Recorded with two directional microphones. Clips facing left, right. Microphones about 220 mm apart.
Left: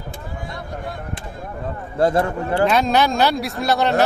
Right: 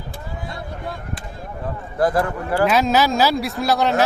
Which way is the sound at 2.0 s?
25° left (ahead or behind).